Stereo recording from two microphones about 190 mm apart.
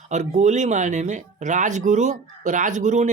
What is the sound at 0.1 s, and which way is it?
Speech, 40° right (ahead or behind).